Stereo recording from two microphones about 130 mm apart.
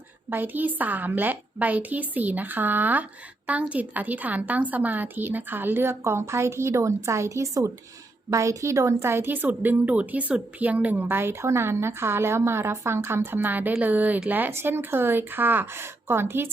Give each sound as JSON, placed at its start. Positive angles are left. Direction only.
{"t": 0.3, "sound": "a woman's voice", "side_deg": -15}